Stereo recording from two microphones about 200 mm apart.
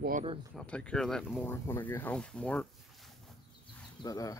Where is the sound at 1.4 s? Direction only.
10° left (ahead or behind).